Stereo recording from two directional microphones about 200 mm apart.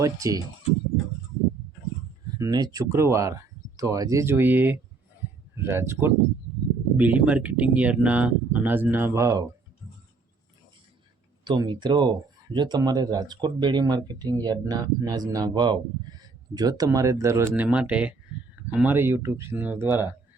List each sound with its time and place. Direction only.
0.0 s speech: 15° right (ahead or behind)
2.4 s speech: 20° right (ahead or behind)
11.4 s speech: 25° right (ahead or behind)